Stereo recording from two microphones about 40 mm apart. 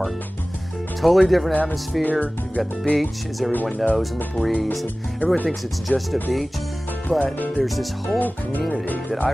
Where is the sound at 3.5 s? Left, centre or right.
Left.